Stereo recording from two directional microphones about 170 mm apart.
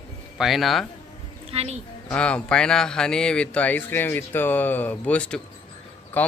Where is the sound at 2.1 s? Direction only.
5° left (ahead or behind).